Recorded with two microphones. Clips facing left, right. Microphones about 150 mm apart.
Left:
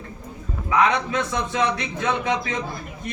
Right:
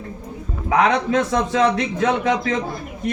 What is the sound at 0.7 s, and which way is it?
A man's voice, 80° right.